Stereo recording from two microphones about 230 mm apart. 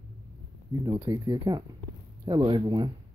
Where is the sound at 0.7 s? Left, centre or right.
Centre.